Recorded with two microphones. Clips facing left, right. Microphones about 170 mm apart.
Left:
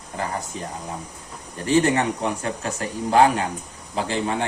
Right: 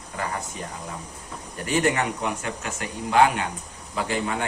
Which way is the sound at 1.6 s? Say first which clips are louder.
Left 4 dB; 30° left (ahead or behind).